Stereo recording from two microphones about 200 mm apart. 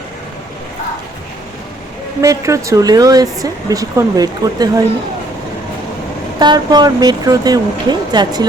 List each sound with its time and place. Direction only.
2.2 s speech: 15° right (ahead or behind)
6.4 s speech: 20° right (ahead or behind)